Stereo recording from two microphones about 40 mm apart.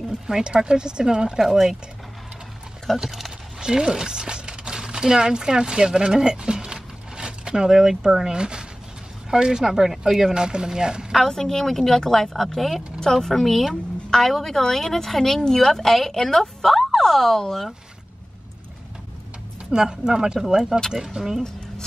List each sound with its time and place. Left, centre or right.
0.3 s speech: centre
1.4 s speech: centre
3.0 s a sound: centre
3.6 s speech: centre
10.3 s speech: centre
11.2 s speech: centre
19.7 s speech: centre